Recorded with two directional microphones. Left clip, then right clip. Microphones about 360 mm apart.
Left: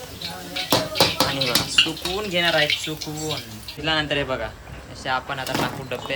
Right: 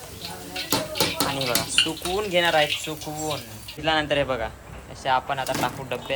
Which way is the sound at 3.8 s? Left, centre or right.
Centre.